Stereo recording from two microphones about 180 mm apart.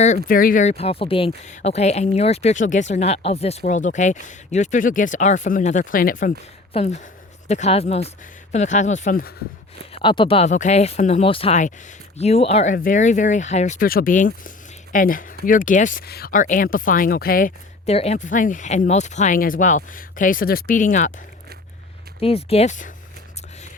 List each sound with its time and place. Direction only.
0.0 s speech: 45° left (ahead or behind)
6.7 s speech: 40° left (ahead or behind)
9.9 s speech: 30° left (ahead or behind)
12.7 s speech: 50° left (ahead or behind)
17.8 s speech: 35° left (ahead or behind)
22.2 s speech: 35° left (ahead or behind)